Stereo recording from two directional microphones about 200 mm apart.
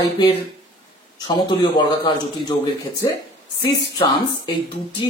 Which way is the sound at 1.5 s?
20° left (ahead or behind).